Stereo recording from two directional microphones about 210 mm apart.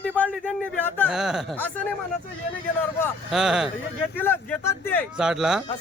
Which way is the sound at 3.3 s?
Centre (ahead or behind).